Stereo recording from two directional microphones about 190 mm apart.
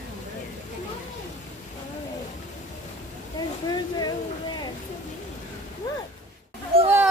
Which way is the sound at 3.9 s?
20° left (ahead or behind).